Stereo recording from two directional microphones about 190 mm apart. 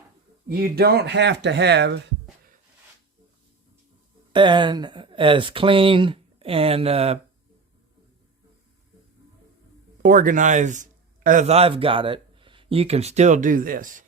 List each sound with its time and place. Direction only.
0.4 s speech: 55° right (ahead or behind)
4.3 s speech: 25° right (ahead or behind)
10.0 s speech: 45° right (ahead or behind)